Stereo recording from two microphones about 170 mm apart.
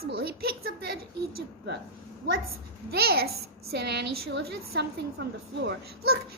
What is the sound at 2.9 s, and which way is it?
Speech, 65° right (ahead or behind).